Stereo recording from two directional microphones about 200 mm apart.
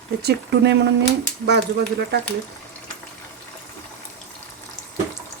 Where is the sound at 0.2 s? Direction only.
55° right (ahead or behind).